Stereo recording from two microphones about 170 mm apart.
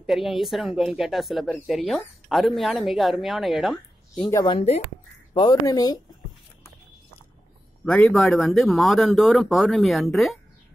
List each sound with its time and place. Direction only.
0.0 s speech: centre (ahead or behind)
4.3 s speech: 20° left (ahead or behind)
4.6 s speech: 40° left (ahead or behind)
5.3 s speech: 25° left (ahead or behind)
7.8 s speech: 5° left (ahead or behind)